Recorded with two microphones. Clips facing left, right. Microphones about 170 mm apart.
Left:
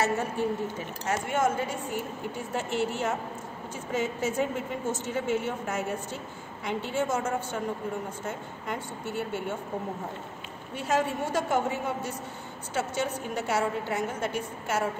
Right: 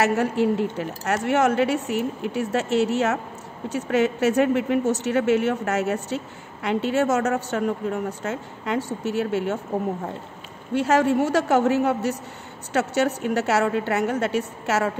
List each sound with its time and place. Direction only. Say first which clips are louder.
0.0 s speech: right 7 dB; 75° right (ahead or behind)
10.7 s speech: right 9 dB; 75° right (ahead or behind)